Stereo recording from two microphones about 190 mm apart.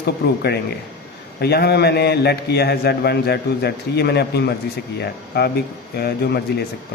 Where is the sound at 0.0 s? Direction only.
60° left (ahead or behind).